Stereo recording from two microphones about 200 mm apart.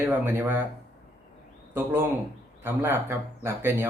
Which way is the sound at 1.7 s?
10° right (ahead or behind).